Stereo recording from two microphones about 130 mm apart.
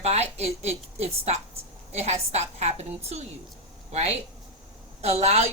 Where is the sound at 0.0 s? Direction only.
55° right (ahead or behind).